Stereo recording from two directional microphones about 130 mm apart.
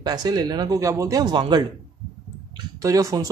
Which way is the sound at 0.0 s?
30° right (ahead or behind).